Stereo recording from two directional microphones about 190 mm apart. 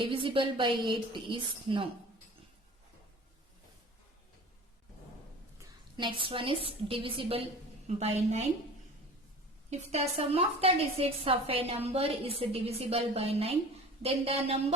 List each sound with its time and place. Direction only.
0.0 s a woman's voice: 25° right (ahead or behind)
6.0 s a woman's voice: 25° right (ahead or behind)
9.6 s a woman's voice: 35° right (ahead or behind)